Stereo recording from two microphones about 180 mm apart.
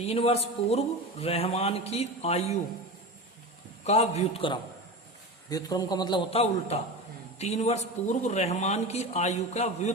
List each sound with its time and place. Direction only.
0.0 s a man's voice: 35° left (ahead or behind)
3.8 s a man's voice: 35° left (ahead or behind)